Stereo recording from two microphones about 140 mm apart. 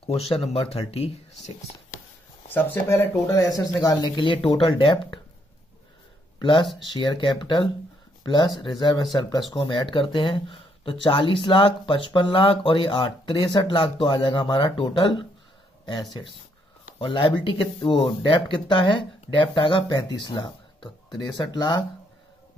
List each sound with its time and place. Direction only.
0.1 s speech: 45° left (ahead or behind)
2.5 s speech: 15° left (ahead or behind); by 5.2 s 35° left (ahead or behind)
6.4 s speech: 35° left (ahead or behind)